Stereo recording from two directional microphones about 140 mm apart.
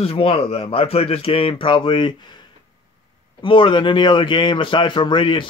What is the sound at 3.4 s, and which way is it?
Speech, 35° left (ahead or behind).